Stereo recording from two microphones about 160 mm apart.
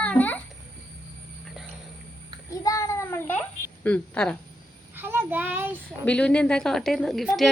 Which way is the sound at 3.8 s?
10° left (ahead or behind).